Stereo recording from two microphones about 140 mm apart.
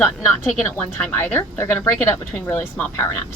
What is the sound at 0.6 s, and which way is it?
A woman's voice, 10° left (ahead or behind).